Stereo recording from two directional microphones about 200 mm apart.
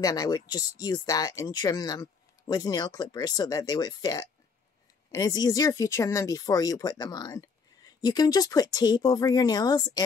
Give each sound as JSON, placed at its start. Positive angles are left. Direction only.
{"t": 0.0, "sound": "speech", "side_deg": 20}